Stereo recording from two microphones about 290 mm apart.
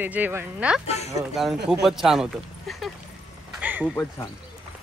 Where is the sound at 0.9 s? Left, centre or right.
Left.